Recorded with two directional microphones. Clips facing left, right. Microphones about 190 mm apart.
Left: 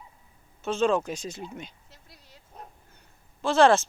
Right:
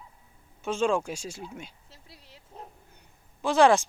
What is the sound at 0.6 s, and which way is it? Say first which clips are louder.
Speech: left 2 dB; 10° right (ahead or behind).